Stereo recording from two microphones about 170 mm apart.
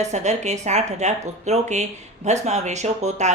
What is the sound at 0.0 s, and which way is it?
A woman's voice, 45° right (ahead or behind).